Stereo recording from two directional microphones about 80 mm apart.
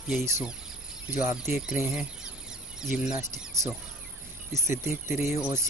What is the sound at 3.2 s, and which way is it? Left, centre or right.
Speech, right.